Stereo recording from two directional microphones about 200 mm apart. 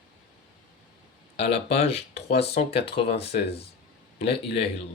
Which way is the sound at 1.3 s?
30° left (ahead or behind).